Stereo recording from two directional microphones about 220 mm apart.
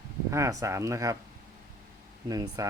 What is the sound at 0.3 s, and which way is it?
Speech, 15° right (ahead or behind).